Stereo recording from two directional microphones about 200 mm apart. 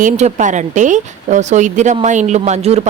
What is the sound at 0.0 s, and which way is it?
A woman's voice, 35° right (ahead or behind).